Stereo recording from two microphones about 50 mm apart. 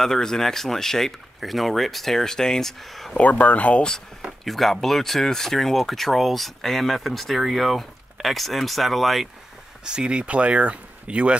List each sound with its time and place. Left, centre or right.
0.0 s speech: centre
3.2 s speech: left
4.5 s speech: centre
9.8 s speech: centre